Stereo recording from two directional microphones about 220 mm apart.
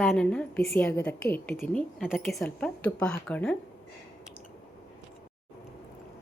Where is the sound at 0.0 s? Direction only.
Centre (ahead or behind).